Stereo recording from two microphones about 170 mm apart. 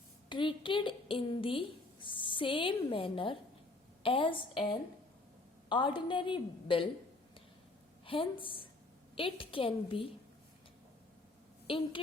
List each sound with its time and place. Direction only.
0.3 s a sound: 30° left (ahead or behind)
4.0 s a woman's voice: 30° left (ahead or behind)
8.0 s a woman's voice: 30° left (ahead or behind)
11.7 s a woman's voice: 30° left (ahead or behind)